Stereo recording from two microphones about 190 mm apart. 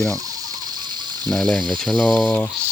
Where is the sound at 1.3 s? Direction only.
5° left (ahead or behind).